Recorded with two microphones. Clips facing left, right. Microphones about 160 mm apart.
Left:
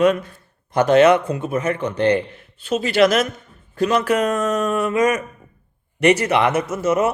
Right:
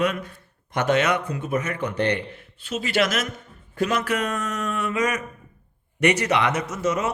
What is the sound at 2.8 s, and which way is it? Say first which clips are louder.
A man's voice: left 7 dB; 30° left (ahead or behind).